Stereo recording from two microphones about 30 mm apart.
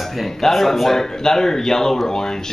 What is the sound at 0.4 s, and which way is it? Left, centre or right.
Speech, centre.